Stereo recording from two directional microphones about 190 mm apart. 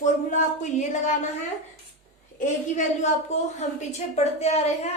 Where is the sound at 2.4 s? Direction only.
40° left (ahead or behind).